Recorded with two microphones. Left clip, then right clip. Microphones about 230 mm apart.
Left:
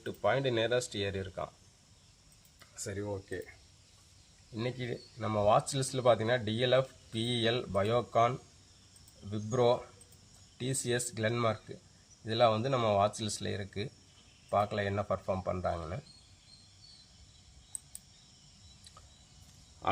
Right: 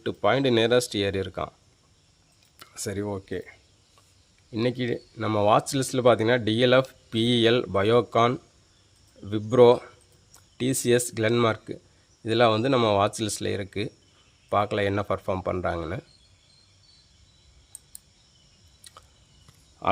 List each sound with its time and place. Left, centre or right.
0.0 s speech: right
2.6 s speech: right
4.5 s speech: right